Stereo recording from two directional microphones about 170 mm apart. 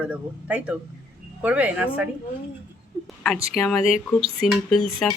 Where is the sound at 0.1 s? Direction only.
10° right (ahead or behind).